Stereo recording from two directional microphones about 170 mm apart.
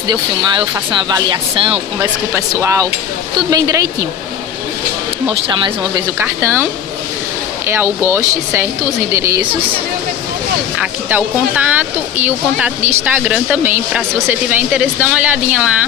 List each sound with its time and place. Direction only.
0.1 s speech: 25° right (ahead or behind)
2.0 s speech: 20° right (ahead or behind)
5.3 s speech: 25° right (ahead or behind)
6.2 s speech: 10° right (ahead or behind)
10.8 s speech: 10° right (ahead or behind)